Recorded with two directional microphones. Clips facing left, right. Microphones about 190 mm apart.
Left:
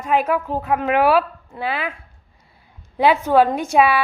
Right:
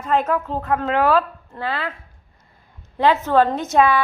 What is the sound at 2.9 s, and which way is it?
A woman's voice, 10° left (ahead or behind).